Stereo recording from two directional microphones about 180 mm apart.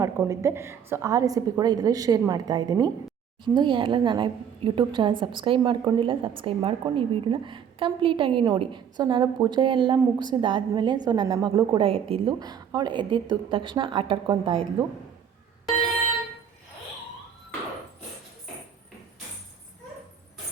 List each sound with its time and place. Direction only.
0.0 s a woman's voice: 15° right (ahead or behind)